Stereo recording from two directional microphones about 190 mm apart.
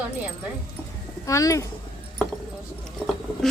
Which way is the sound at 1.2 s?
15° left (ahead or behind).